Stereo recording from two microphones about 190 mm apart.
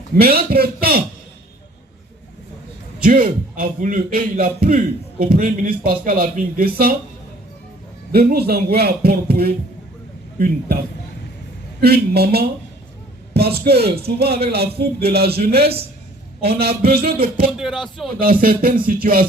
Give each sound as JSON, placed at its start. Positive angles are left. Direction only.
{"t": 0.2, "sound": "a man's voice", "side_deg": -55}
{"t": 3.0, "sound": "a man's voice", "side_deg": -50}
{"t": 8.1, "sound": "a man's voice", "side_deg": -55}
{"t": 11.8, "sound": "a man's voice", "side_deg": -55}
{"t": 17.6, "sound": "speech", "side_deg": 0}
{"t": 18.2, "sound": "a man's voice", "side_deg": -50}